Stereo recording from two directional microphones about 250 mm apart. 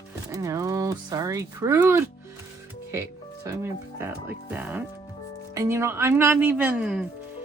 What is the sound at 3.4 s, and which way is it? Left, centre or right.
Speech, centre.